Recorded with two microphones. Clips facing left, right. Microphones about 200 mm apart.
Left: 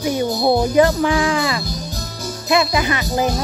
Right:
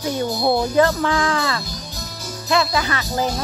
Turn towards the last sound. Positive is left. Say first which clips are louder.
# left 3 dB
turn(degrees=15)  # may be behind; listen again after turning